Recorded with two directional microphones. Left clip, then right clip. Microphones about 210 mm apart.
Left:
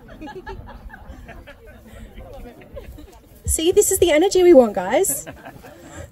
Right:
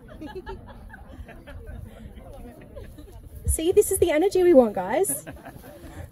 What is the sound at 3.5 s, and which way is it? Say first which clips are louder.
Speech: left 4 dB; 35° left (ahead or behind).